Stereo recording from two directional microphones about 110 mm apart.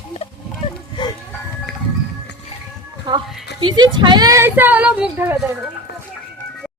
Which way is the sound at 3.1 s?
45° right (ahead or behind).